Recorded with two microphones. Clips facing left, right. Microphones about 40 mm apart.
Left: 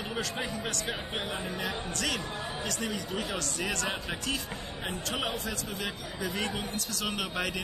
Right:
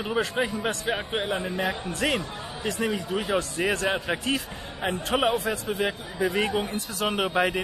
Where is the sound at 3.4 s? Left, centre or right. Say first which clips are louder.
Right 7 dB; right.